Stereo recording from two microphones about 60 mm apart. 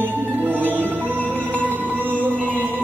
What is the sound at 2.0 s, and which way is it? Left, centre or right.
Music, right.